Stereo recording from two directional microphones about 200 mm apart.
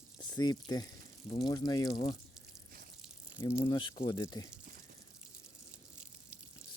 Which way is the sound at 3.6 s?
25° left (ahead or behind).